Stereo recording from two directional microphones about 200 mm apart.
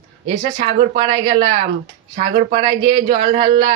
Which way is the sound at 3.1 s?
25° right (ahead or behind).